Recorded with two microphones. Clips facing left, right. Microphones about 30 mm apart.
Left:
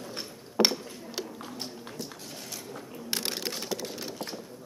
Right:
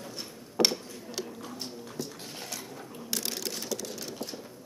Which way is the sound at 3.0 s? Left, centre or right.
Left.